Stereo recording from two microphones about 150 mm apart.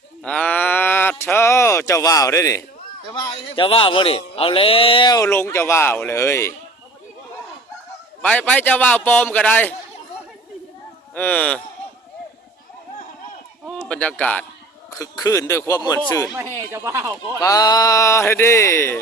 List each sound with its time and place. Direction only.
0.2 s a sound: 10° left (ahead or behind)
3.1 s a man's voice: 25° left (ahead or behind)
8.2 s a man's voice: 10° left (ahead or behind)
11.1 s a man's voice: 10° left (ahead or behind)
13.8 s a man's voice: 5° left (ahead or behind)
14.8 s a man's voice: 20° left (ahead or behind)
16.6 s speech: 15° right (ahead or behind)
17.4 s a man's voice: 25° left (ahead or behind)